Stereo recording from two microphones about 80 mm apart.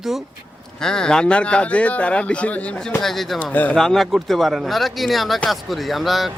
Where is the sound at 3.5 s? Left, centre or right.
Centre.